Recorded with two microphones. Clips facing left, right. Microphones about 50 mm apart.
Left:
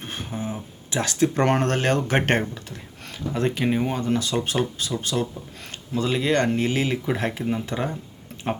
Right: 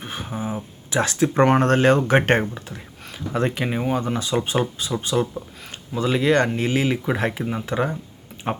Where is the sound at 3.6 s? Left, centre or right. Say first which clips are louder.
Left 1 dB; centre.